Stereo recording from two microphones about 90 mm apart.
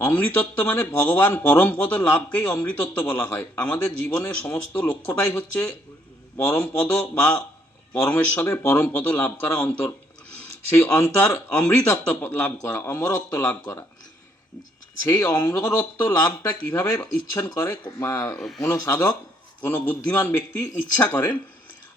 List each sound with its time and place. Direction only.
0.0 s a man's voice: 25° left (ahead or behind)
10.9 s speech: 25° left (ahead or behind)
15.0 s speech: 30° left (ahead or behind)
18.3 s speech: centre (ahead or behind)
18.6 s speech: 40° left (ahead or behind)
19.6 s speech: 25° left (ahead or behind)